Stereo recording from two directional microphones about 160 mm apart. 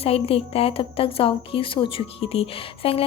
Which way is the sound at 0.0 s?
35° left (ahead or behind).